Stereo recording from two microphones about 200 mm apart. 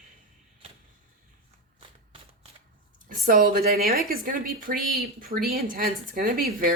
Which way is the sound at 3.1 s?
45° right (ahead or behind).